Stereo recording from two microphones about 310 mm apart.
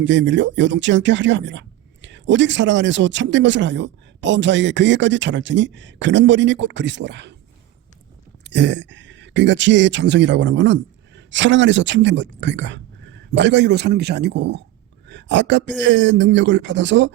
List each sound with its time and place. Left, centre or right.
0.0 s speech: right
8.4 s speech: right